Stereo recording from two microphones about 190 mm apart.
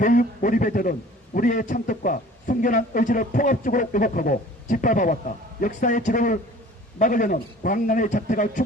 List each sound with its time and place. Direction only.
0.0 s a man's voice: 45° left (ahead or behind)